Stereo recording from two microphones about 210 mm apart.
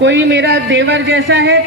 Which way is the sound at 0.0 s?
55° right (ahead or behind).